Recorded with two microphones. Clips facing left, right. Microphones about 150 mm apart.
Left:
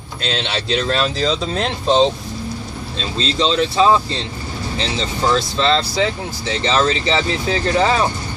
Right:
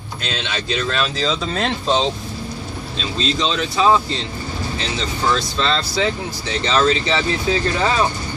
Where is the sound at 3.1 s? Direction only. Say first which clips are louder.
Left 4 dB; 30° left (ahead or behind).